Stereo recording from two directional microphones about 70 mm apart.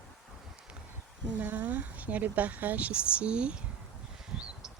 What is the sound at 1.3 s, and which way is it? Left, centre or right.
Speech, right.